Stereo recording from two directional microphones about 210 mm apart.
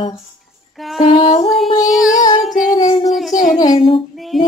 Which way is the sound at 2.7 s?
20° left (ahead or behind).